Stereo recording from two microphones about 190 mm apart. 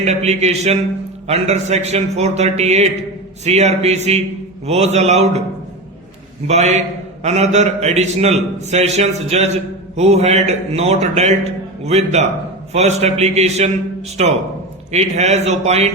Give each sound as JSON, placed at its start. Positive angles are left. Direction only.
{"t": 0.0, "sound": "a man's voice", "side_deg": -35}
{"t": 6.5, "sound": "a man's voice", "side_deg": -35}